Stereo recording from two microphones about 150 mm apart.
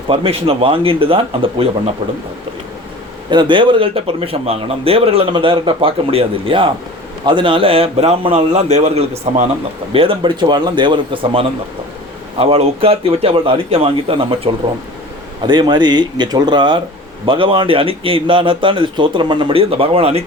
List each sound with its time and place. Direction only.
0.1 s a man's voice: 40° right (ahead or behind)
3.2 s a man's voice: 30° right (ahead or behind); by 9.5 s 50° right (ahead or behind)
9.9 s a man's voice: 35° right (ahead or behind)